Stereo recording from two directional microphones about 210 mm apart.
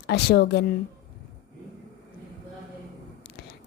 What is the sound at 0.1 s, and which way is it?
Speech, 50° left (ahead or behind).